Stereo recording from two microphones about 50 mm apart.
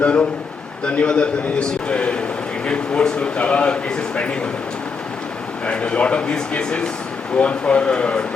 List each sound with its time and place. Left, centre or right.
0.0 s speech: left
5.6 s speech: left